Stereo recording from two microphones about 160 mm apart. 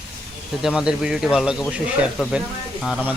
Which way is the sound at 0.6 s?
5° right (ahead or behind).